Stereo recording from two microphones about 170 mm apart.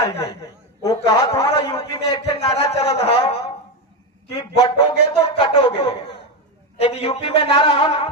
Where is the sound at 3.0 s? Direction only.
35° left (ahead or behind).